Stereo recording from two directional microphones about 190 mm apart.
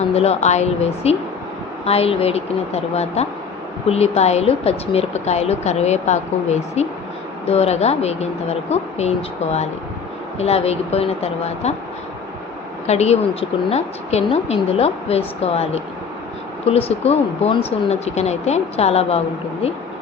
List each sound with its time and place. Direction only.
0.1 s speech: 35° left (ahead or behind)
12.9 s speech: 35° left (ahead or behind)